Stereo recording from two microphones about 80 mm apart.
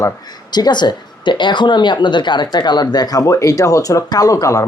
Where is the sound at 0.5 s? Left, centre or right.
Left.